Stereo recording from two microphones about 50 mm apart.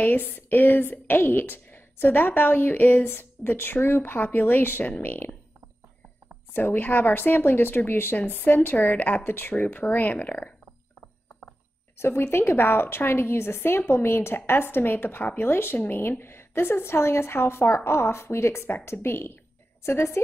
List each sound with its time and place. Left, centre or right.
0.0 s a woman's voice: left
6.5 s a woman's voice: left
12.0 s a woman's voice: left